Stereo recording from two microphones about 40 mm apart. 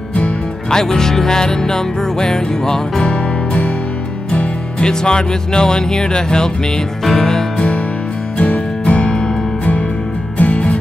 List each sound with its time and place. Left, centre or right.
0.1 s music: left
0.7 s music: centre
4.7 s speech: left
7.1 s music: centre
7.5 s music: left
10.3 s music: left